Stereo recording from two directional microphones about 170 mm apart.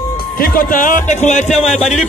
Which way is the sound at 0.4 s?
55° left (ahead or behind).